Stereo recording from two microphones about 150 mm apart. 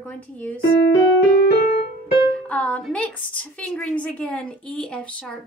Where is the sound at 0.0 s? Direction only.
10° left (ahead or behind).